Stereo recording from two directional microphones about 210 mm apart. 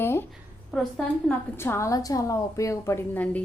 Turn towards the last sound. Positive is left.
turn(degrees=10)  # may be behind; listen again after turning